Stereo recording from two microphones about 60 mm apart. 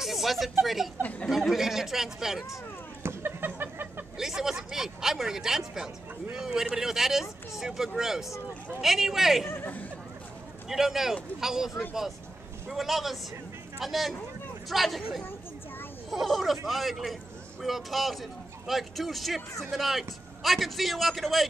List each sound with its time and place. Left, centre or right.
0.0 s a woman's voice: centre
3.0 s a sound: right
4.2 s a man's voice: centre
9.5 s speech: left
10.7 s a man's voice: centre
16.1 s a man's voice: centre